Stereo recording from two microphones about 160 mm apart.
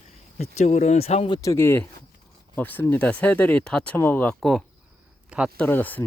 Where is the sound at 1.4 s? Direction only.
15° left (ahead or behind).